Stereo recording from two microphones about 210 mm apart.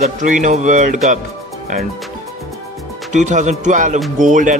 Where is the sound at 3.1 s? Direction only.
35° right (ahead or behind).